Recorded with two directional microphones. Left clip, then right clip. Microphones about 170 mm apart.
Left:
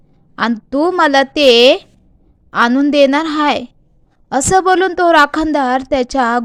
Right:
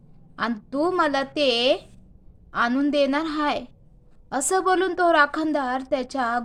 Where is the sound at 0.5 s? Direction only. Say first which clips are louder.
Left 8 dB; 35° left (ahead or behind).